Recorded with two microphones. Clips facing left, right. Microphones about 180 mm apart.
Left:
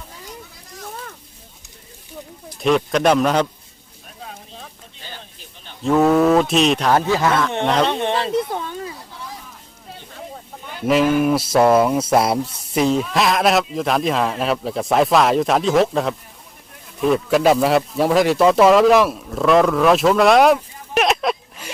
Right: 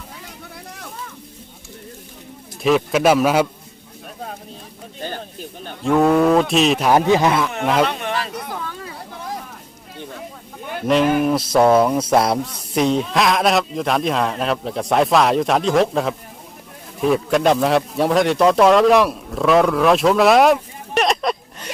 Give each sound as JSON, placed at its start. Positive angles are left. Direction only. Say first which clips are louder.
{"t": 2.6, "sound": "speech", "louder": "right 1 dB", "side_deg": 0}
{"t": 4.9, "sound": "a sound", "louder": "right 12 dB", "side_deg": -50}
{"t": 5.8, "sound": "speech", "louder": "even", "side_deg": 0}
{"t": 7.1, "sound": "speech", "louder": "right 2 dB", "side_deg": -20}
{"t": 7.9, "sound": "a sound", "louder": "left 4 dB", "side_deg": 30}
{"t": 10.8, "sound": "speech", "louder": "even", "side_deg": 5}